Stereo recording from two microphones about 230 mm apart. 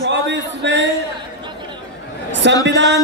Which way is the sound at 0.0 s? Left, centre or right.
Right.